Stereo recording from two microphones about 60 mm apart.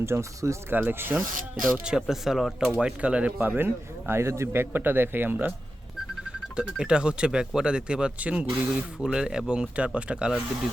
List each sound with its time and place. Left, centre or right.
0.0 s speech: right
0.7 s a man's voice: right
1.8 s speech: centre
2.6 s speech: centre
3.3 s a man's voice: right
6.6 s speech: centre